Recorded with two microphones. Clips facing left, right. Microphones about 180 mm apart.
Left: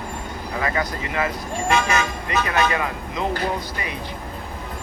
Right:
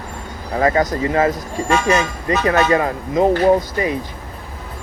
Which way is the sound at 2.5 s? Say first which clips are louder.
Right 8 dB; 35° right (ahead or behind).